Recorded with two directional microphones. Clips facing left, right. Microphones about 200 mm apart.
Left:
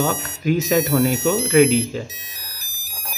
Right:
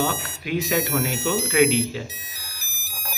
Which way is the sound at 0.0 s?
45° left (ahead or behind).